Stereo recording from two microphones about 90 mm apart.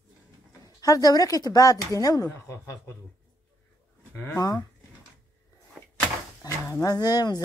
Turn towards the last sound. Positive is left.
turn(degrees=45)  # may be behind; listen again after turning